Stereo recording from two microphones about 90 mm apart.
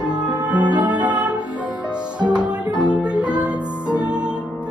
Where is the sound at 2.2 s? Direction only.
55° right (ahead or behind).